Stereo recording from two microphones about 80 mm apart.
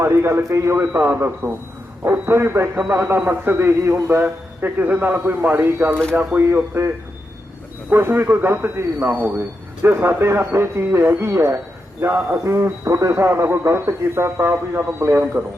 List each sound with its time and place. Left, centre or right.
0.0 s a man's voice: right
11.5 s a sound: right
12.4 s a man's voice: right